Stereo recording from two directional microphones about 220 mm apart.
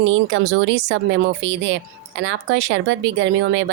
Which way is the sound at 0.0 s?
60° right (ahead or behind).